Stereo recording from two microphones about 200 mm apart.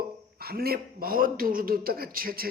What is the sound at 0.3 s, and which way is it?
Speech, 50° right (ahead or behind).